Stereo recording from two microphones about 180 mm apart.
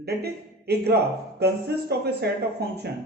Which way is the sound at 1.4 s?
65° right (ahead or behind).